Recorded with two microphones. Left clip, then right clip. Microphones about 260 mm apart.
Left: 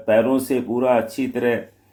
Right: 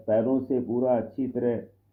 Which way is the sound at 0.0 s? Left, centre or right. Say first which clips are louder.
Left 7 dB; left.